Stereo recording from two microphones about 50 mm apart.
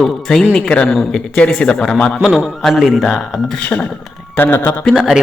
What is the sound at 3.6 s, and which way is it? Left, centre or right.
Speech, left.